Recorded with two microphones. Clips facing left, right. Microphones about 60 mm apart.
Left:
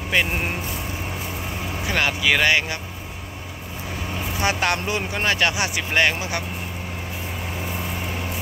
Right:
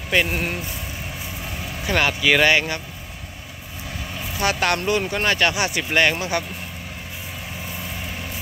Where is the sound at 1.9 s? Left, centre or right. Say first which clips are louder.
Right 2 dB; centre.